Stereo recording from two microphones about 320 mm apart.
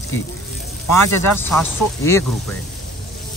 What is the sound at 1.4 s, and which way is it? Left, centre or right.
Speech, centre.